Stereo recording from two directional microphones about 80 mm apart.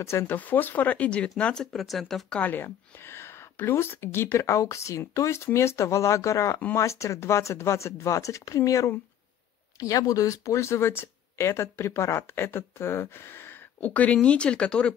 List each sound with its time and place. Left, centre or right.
0.0 s speech: left
0.4 s speech: left
2.5 s speech: left
13.7 s speech: centre